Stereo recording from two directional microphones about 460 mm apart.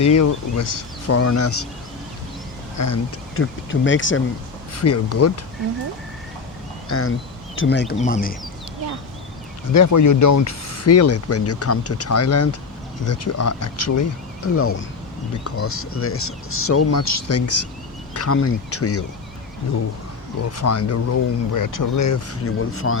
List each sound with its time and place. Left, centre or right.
0.0 s speech: left
2.7 s speech: left
6.8 s speech: left
9.7 s speech: left
20.6 s speech: left